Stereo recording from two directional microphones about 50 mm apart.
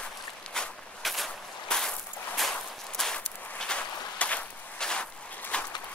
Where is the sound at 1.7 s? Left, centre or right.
Centre.